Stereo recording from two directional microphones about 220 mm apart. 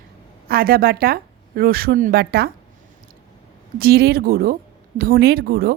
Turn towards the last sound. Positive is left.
turn(degrees=-45)  # may be behind; listen again after turning